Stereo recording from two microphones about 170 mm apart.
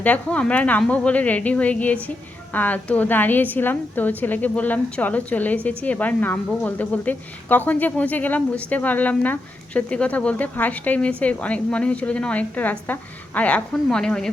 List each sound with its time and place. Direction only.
0.0 s a woman's voice: 10° left (ahead or behind)